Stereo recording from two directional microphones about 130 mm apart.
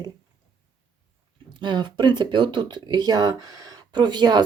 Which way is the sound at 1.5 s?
35° right (ahead or behind).